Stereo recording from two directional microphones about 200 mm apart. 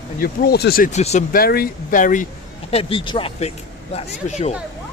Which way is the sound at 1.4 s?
50° left (ahead or behind).